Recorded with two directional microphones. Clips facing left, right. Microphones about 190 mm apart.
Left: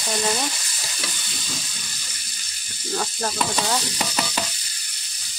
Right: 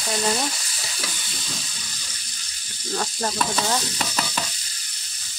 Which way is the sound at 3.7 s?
10° left (ahead or behind).